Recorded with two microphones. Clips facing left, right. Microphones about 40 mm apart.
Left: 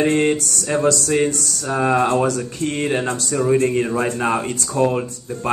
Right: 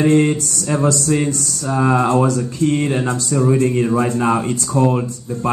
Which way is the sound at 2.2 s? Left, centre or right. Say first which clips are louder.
Right 4 dB; left.